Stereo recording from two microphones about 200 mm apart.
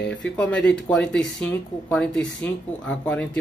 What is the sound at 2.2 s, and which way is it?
Speech, 70° left (ahead or behind).